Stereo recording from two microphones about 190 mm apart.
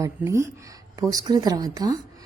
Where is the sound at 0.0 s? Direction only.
15° right (ahead or behind).